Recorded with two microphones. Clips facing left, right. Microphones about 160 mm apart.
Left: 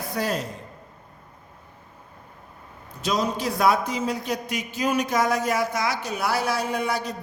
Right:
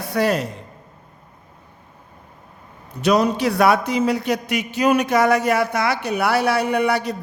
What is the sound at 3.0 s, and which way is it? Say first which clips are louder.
A man's voice: right 8 dB; 70° right (ahead or behind).